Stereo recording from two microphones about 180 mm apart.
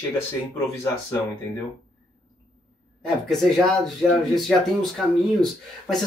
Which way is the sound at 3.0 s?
Centre (ahead or behind).